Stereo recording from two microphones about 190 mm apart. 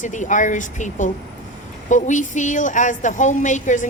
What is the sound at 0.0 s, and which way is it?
A woman's voice, 40° left (ahead or behind).